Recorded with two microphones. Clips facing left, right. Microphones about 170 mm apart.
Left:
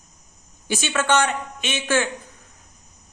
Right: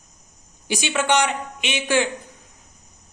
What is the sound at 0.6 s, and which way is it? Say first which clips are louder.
A man's voice: even; 15° right (ahead or behind).